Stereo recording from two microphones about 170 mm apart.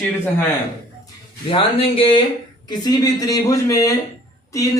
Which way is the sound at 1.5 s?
30° left (ahead or behind).